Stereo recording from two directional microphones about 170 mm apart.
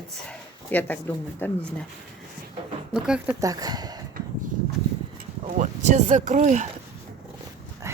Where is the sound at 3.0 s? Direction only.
5° right (ahead or behind).